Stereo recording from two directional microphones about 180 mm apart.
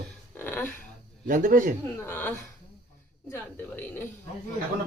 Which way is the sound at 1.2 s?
50° right (ahead or behind).